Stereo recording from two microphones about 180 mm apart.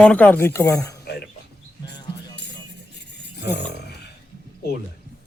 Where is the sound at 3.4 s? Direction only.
70° left (ahead or behind).